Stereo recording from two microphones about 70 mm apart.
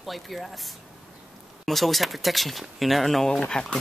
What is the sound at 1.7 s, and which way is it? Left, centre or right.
Speech, centre.